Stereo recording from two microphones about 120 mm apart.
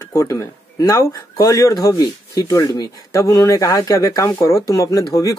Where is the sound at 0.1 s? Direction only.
25° left (ahead or behind).